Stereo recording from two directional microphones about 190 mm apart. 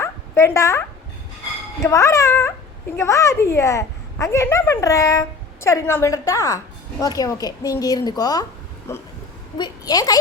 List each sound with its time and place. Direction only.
0.0 s dog: 15° left (ahead or behind)
1.8 s a woman's voice: 15° left (ahead or behind)
9.6 s a woman's voice: 20° left (ahead or behind)